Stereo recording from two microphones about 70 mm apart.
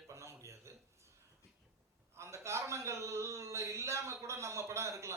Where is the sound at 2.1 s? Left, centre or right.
Right.